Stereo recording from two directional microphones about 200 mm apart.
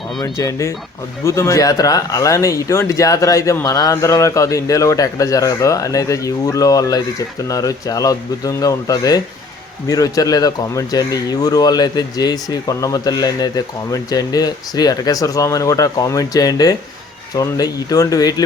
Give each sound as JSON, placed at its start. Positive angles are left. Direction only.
{"t": 0.2, "sound": "speech", "side_deg": 15}